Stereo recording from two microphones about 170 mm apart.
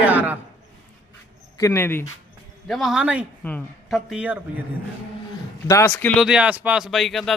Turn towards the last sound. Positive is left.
turn(degrees=0)  # may be behind; listen again after turning